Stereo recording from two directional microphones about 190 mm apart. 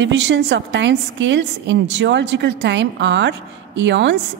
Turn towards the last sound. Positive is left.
turn(degrees=-65)  # may be behind; listen again after turning